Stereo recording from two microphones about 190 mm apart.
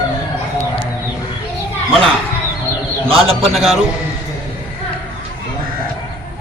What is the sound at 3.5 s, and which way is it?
Speech, centre (ahead or behind).